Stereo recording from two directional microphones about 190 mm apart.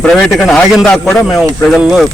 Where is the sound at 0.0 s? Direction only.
5° left (ahead or behind).